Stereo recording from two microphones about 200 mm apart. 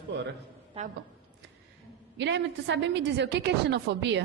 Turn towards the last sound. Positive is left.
turn(degrees=-60)  # may be behind; listen again after turning